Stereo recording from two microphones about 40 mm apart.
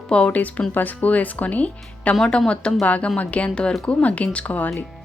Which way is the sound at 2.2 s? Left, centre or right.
Centre.